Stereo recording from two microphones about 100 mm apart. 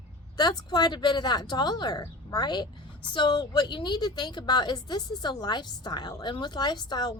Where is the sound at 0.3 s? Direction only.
45° left (ahead or behind).